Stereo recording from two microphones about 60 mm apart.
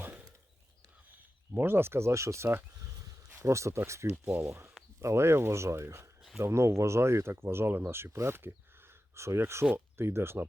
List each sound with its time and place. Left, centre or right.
0.0 s a sound: right
1.5 s speech: right
3.4 s speech: right